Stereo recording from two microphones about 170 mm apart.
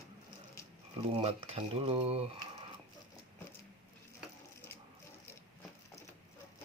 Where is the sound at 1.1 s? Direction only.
35° right (ahead or behind).